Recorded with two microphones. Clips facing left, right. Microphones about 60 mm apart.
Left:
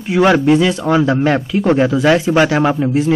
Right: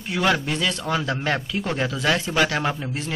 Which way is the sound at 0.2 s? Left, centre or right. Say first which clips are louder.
Left 11 dB; left.